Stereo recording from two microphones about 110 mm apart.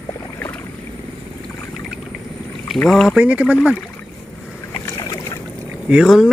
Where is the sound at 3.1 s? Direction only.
10° right (ahead or behind).